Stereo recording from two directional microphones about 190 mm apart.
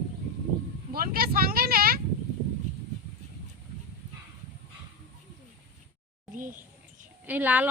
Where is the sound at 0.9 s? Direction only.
50° right (ahead or behind).